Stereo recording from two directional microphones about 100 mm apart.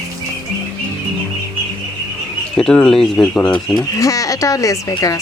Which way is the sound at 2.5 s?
5° left (ahead or behind).